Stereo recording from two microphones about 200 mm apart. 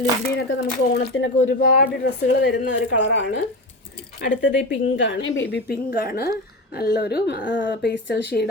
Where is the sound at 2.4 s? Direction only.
60° left (ahead or behind).